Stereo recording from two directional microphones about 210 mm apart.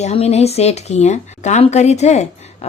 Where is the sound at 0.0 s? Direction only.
30° left (ahead or behind).